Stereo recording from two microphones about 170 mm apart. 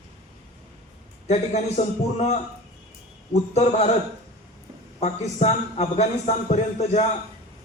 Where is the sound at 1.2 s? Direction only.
40° left (ahead or behind).